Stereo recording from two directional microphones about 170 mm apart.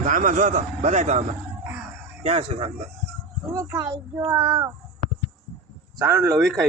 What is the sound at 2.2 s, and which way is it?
Speech, 40° right (ahead or behind).